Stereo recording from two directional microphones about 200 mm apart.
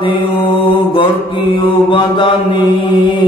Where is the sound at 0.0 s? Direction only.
25° left (ahead or behind).